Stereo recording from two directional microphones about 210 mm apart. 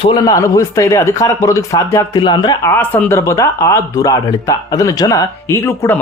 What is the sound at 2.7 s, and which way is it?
Speech, 10° left (ahead or behind).